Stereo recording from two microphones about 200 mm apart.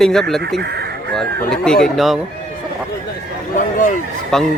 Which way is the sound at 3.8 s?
40° left (ahead or behind).